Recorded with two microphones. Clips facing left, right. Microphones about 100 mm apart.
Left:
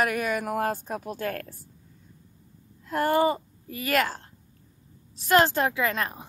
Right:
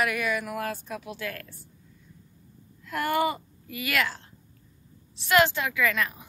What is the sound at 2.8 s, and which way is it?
A woman's voice, 35° left (ahead or behind).